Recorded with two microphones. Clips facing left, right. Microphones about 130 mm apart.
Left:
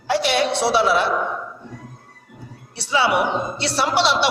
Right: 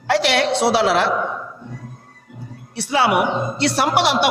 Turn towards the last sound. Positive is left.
turn(degrees=-55)  # may be behind; listen again after turning